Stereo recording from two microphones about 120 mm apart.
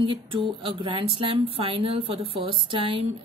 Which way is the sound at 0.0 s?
45° right (ahead or behind).